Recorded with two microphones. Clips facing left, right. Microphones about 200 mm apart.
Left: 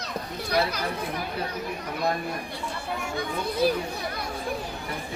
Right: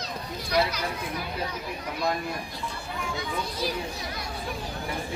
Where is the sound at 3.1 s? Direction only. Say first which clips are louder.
Left 5 dB; 55° left (ahead or behind).